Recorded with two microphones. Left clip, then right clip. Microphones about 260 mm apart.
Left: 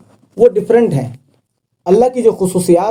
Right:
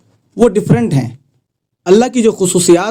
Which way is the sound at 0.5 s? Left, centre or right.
Right.